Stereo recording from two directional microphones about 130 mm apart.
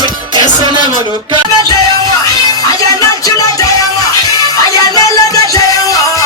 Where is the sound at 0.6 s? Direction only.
35° right (ahead or behind).